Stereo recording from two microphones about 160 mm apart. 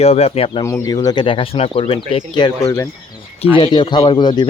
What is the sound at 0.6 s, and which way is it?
Speech, 20° left (ahead or behind).